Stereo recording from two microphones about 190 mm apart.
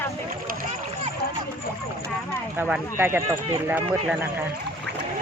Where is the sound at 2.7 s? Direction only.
10° right (ahead or behind).